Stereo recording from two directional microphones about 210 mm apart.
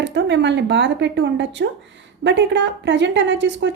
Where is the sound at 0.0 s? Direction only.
60° right (ahead or behind).